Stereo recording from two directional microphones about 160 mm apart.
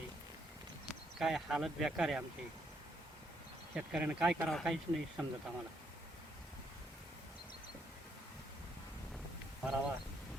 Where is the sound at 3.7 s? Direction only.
5° right (ahead or behind).